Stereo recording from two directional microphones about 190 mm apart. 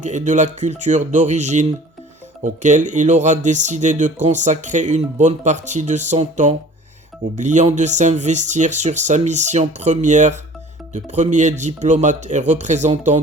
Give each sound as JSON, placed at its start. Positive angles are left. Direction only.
{"t": 0.0, "sound": "speech", "side_deg": -40}